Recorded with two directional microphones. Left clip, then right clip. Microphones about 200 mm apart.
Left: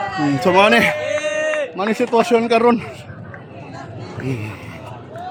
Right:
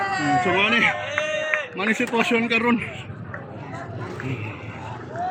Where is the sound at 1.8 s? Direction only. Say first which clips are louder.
Left 7 dB; 20° left (ahead or behind).